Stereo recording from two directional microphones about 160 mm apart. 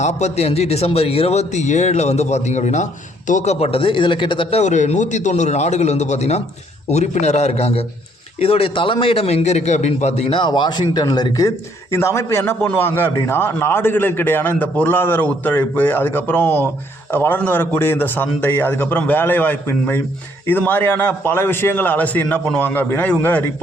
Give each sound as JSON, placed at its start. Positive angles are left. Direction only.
{"t": 0.0, "sound": "a man's voice", "side_deg": 45}
{"t": 4.6, "sound": "a man's voice", "side_deg": 45}